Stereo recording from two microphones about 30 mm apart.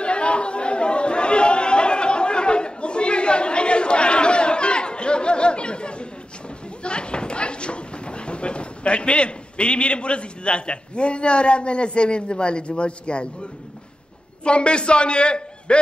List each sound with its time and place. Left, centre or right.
0.0 s chatter: left
6.8 s speech: left
14.4 s a man's voice: left